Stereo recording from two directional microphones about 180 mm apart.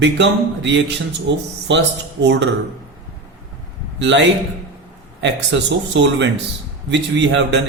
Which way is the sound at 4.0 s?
90° right.